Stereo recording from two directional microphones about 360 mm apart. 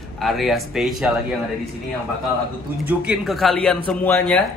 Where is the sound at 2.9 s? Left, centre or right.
Centre.